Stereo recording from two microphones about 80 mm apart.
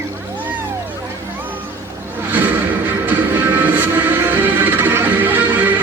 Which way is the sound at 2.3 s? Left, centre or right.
Right.